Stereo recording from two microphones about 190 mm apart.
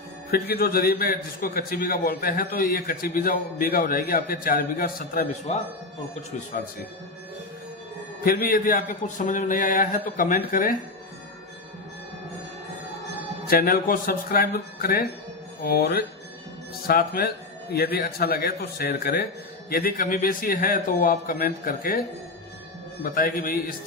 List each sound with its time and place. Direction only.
0.3 s a man's voice: 55° left (ahead or behind)
8.2 s a man's voice: 50° left (ahead or behind)
13.5 s a man's voice: 50° left (ahead or behind)
23.0 s a man's voice: 50° left (ahead or behind)